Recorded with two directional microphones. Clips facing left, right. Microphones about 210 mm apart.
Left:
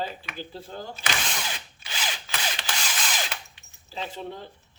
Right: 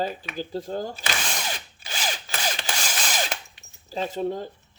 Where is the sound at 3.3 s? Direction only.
45° right (ahead or behind).